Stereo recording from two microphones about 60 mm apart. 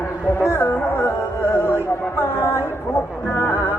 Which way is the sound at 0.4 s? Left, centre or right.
Left.